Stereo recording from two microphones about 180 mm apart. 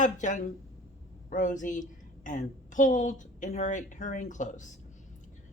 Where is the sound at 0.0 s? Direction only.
45° left (ahead or behind).